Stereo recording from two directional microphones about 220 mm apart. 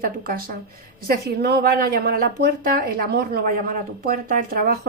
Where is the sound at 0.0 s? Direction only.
40° right (ahead or behind).